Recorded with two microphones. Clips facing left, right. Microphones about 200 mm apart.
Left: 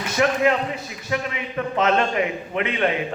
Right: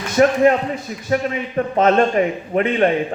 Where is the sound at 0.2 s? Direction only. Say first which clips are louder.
Right 6 dB; 40° right (ahead or behind).